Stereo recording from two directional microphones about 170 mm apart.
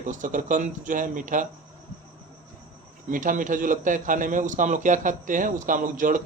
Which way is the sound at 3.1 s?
50° right (ahead or behind).